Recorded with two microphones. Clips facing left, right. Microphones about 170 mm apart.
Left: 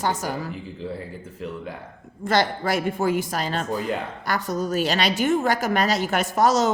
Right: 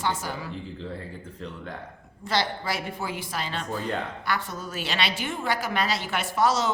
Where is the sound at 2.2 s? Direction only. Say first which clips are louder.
Left 6 dB; 50° left (ahead or behind).